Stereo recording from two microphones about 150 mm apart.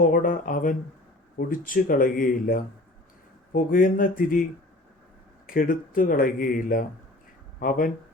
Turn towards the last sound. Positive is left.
turn(degrees=70)  # may be behind; listen again after turning